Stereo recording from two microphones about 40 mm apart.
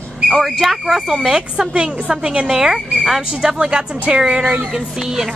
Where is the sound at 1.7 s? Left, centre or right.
Right.